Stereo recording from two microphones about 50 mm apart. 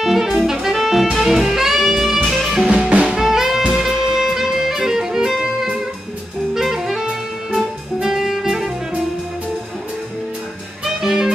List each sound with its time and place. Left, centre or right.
0.0 s music: centre
2.6 s music: centre
3.2 s music: centre
6.5 s saxophone: centre
8.0 s music: centre
11.0 s music: centre